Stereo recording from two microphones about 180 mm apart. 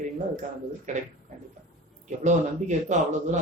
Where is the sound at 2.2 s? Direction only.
40° right (ahead or behind).